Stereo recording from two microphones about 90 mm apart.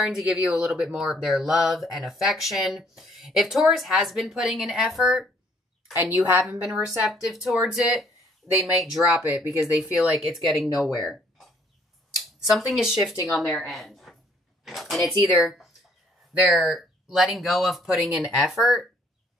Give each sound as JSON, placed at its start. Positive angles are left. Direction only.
{"t": 0.0, "sound": "speech", "side_deg": -5}
{"t": 5.9, "sound": "a woman's voice", "side_deg": -25}
{"t": 6.4, "sound": "a woman's voice", "side_deg": -10}